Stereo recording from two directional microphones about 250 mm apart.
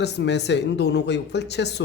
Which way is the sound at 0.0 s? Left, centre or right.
Left.